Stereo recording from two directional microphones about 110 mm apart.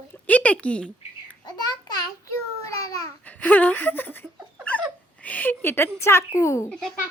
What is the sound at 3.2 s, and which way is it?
Speech, 15° left (ahead or behind).